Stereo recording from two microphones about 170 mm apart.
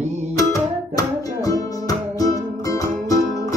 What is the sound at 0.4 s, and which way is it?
Music, 20° left (ahead or behind).